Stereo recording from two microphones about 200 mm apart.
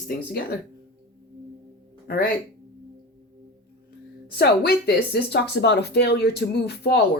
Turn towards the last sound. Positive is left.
turn(degrees=55)  # may be behind; listen again after turning